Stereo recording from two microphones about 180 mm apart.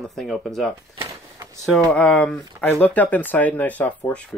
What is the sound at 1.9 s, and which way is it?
Speech, 5° left (ahead or behind).